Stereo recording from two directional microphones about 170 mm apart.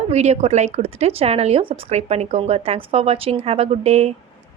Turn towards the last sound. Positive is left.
turn(degrees=-40)  # may be behind; listen again after turning